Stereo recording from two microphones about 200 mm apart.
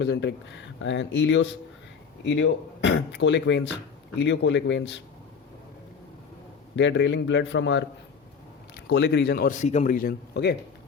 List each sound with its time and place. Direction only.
0.0 s speech: 60° left (ahead or behind)
6.7 s a man's voice: 65° left (ahead or behind)